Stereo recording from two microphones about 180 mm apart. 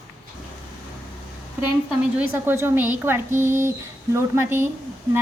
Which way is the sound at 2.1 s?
10° right (ahead or behind).